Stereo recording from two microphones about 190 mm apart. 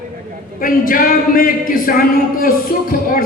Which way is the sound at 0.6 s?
45° left (ahead or behind).